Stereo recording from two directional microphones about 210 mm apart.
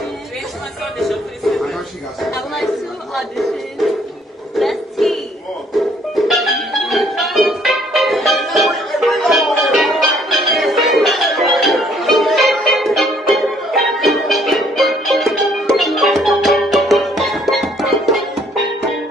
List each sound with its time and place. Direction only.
0.9 s music: centre (ahead or behind)
2.2 s speech: centre (ahead or behind)
3.2 s music: centre (ahead or behind)